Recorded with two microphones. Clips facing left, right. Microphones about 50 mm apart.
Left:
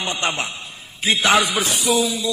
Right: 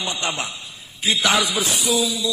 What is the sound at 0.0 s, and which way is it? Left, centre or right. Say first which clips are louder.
A man's voice: left 2 dB; left.